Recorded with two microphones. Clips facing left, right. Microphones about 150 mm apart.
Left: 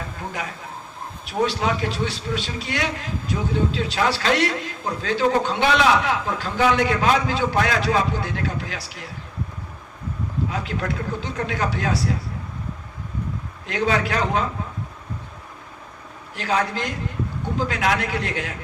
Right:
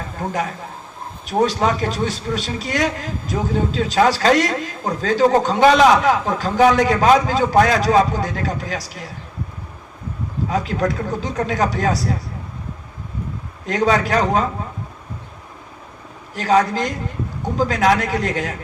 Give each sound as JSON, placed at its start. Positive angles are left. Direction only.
{"t": 1.3, "sound": "a man's voice", "side_deg": -45}
{"t": 10.5, "sound": "a man's voice", "side_deg": -40}
{"t": 13.7, "sound": "a man's voice", "side_deg": -40}
{"t": 16.3, "sound": "a man's voice", "side_deg": -40}